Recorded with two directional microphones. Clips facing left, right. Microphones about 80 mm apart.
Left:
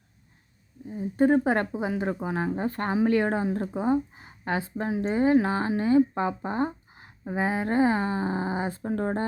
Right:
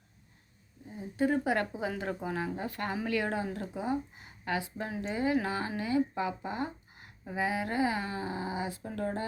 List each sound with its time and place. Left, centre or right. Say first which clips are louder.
1.1 s speech: left 7 dB; left